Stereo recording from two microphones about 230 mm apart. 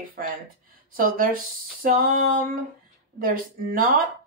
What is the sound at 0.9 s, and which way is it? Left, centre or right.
Speech, right.